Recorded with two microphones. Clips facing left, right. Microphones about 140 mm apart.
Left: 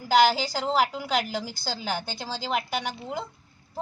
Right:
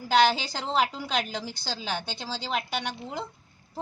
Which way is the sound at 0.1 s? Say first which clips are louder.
Left 2 dB; 5° left (ahead or behind).